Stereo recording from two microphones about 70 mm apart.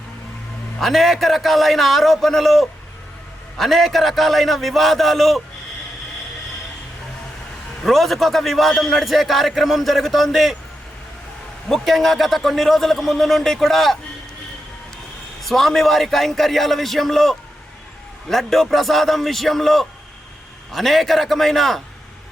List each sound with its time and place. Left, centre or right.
0.8 s a man's voice: centre
7.9 s a man's voice: centre
11.7 s a man's voice: centre
15.4 s a man's voice: centre